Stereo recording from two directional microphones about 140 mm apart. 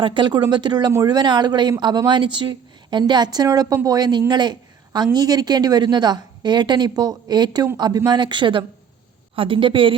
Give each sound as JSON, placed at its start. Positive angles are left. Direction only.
{"t": 0.0, "sound": "a woman's voice", "side_deg": -35}
{"t": 4.3, "sound": "a sound", "side_deg": -30}
{"t": 5.1, "sound": "a woman's voice", "side_deg": -30}